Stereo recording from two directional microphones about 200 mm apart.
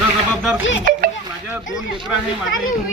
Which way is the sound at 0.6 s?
70° left (ahead or behind).